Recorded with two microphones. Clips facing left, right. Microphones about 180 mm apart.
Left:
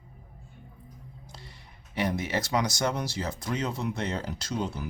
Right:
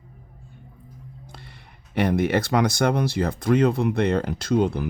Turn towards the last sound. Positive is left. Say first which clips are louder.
# right 11 dB
turn(degrees=-60)  # may be behind; listen again after turning